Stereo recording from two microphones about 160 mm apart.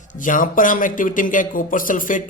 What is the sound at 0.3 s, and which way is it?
Speech, 55° left (ahead or behind).